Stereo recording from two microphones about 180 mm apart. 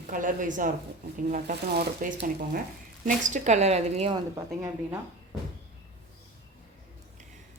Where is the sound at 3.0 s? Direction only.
45° right (ahead or behind).